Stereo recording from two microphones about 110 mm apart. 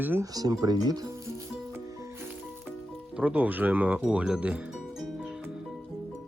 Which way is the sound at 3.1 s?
10° right (ahead or behind).